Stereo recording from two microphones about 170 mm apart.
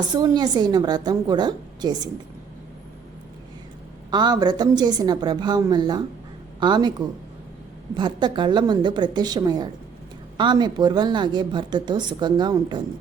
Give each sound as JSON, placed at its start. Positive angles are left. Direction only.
{"t": 0.1, "sound": "a woman's voice", "side_deg": -25}
{"t": 4.1, "sound": "a woman's voice", "side_deg": -25}
{"t": 7.9, "sound": "a woman's voice", "side_deg": -25}